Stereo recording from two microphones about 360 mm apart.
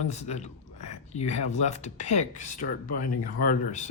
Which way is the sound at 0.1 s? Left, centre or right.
Centre.